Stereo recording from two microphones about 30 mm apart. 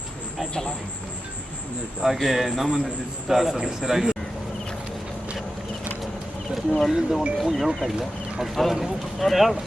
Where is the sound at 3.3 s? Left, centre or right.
Centre.